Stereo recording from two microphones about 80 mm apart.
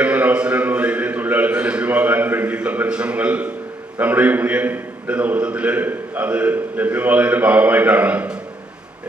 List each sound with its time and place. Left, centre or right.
0.0 s a man's voice: centre